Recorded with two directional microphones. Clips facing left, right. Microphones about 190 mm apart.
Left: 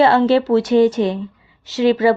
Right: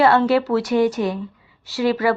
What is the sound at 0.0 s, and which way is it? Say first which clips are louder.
Speech: left 3 dB; 25° left (ahead or behind).